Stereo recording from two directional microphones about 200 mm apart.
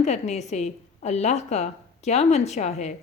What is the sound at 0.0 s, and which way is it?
A woman's voice, 35° left (ahead or behind).